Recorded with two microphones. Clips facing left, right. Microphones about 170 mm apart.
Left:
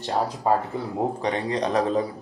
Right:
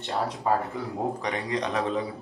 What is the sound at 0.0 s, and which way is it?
Speech, 35° left (ahead or behind).